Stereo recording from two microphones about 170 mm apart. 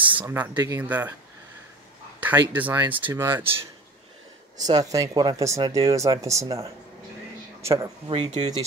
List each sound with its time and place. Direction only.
0.2 s speech: 10° right (ahead or behind)
2.1 s a sound: 10° right (ahead or behind)
2.5 s speech: 10° right (ahead or behind)
4.6 s speech: 20° right (ahead or behind)
8.1 s speech: 35° right (ahead or behind)